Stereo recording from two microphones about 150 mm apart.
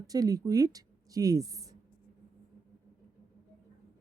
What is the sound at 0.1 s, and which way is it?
A woman's voice, 25° right (ahead or behind).